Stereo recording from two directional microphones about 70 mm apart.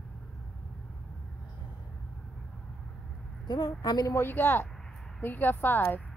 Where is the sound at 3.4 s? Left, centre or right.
Left.